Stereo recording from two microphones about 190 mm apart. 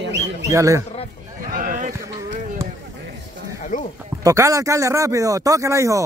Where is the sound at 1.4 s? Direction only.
45° right (ahead or behind).